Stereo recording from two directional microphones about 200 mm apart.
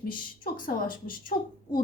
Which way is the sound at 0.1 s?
45° left (ahead or behind).